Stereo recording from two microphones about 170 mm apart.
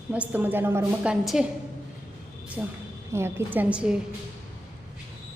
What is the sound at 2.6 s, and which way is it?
A woman's voice, 5° right (ahead or behind).